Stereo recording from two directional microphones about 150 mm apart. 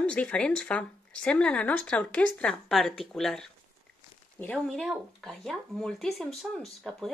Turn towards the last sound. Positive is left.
turn(degrees=0)  # may be behind; listen again after turning